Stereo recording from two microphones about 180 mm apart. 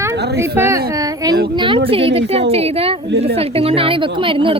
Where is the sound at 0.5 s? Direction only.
15° right (ahead or behind).